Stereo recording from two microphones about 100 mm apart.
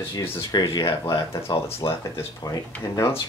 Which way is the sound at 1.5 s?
30° left (ahead or behind).